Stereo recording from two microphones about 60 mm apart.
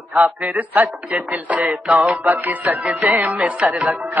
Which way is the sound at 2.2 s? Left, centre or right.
Right.